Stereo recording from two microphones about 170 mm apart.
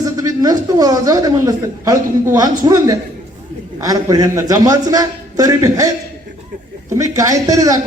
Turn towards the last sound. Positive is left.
turn(degrees=-20)  # may be behind; listen again after turning